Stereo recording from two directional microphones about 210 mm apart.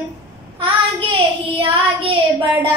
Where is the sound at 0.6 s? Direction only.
25° right (ahead or behind).